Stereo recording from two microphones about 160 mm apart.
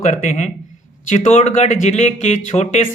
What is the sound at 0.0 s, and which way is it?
Speech, 50° left (ahead or behind).